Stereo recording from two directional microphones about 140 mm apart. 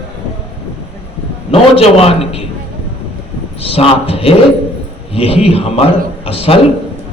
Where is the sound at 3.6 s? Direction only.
45° left (ahead or behind).